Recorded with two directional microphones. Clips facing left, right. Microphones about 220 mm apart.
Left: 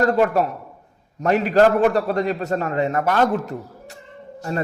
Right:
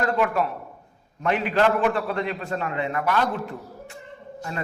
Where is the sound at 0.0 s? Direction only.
40° left (ahead or behind).